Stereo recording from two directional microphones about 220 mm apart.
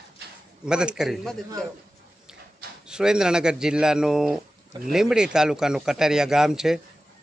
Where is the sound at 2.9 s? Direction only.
5° right (ahead or behind).